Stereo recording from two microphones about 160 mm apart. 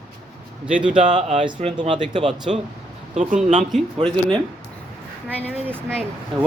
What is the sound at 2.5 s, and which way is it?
Speech, 40° right (ahead or behind).